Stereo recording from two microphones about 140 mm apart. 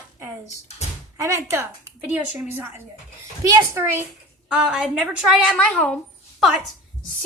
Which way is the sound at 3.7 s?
20° right (ahead or behind).